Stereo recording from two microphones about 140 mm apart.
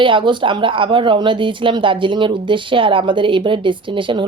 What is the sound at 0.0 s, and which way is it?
A woman's voice, 35° right (ahead or behind).